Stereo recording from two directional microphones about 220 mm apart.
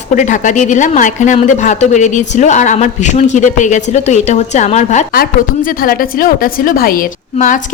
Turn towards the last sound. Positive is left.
turn(degrees=35)  # may be behind; listen again after turning